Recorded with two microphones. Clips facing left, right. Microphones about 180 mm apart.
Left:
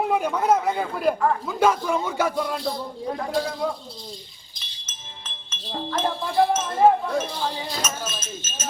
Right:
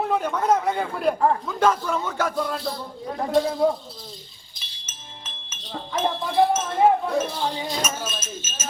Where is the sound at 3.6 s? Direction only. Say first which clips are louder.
Right 6 dB; 35° right (ahead or behind).